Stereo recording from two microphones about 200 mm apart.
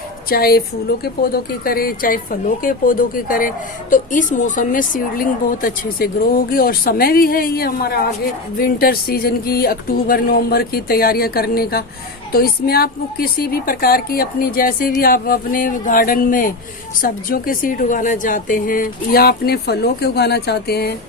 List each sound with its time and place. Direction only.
0.3 s a woman's voice: 50° left (ahead or behind)